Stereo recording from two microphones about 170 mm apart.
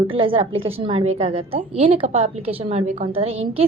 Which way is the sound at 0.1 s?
30° right (ahead or behind).